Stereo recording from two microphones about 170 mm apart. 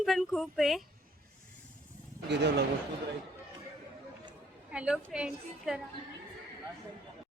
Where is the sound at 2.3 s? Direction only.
90° right.